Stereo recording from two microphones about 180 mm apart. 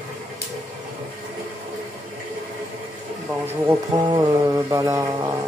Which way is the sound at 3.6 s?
25° right (ahead or behind).